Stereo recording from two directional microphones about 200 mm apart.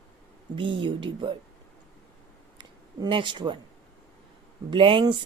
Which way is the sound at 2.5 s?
25° right (ahead or behind).